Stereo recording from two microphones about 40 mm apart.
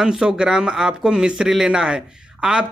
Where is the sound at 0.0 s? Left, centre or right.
Centre.